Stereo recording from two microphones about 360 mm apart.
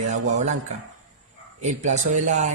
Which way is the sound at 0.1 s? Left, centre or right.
Centre.